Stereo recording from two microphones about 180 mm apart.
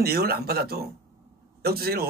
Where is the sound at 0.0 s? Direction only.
60° right (ahead or behind).